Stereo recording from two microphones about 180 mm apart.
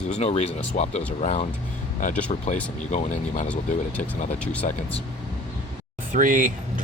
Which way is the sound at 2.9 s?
40° left (ahead or behind).